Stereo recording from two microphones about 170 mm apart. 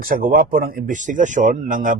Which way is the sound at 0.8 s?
50° right (ahead or behind).